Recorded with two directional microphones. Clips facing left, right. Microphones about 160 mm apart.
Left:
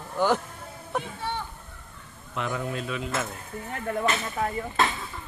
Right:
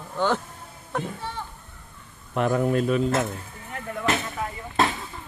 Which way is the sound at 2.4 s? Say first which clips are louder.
Right 9 dB; 45° right (ahead or behind).